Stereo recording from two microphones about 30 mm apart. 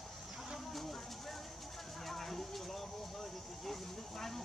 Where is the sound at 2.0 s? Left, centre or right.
Centre.